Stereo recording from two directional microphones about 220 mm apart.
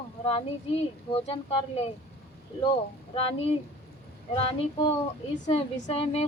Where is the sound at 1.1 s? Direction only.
25° left (ahead or behind).